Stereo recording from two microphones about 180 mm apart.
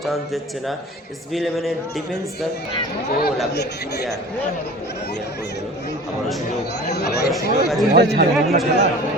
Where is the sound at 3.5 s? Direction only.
65° left (ahead or behind).